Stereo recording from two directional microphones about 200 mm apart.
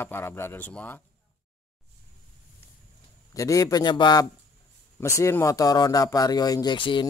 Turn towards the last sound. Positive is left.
turn(degrees=25)  # may be behind; listen again after turning